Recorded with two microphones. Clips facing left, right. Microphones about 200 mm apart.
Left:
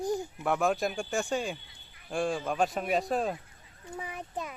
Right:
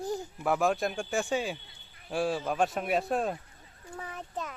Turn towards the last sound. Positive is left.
turn(degrees=10)  # may be behind; listen again after turning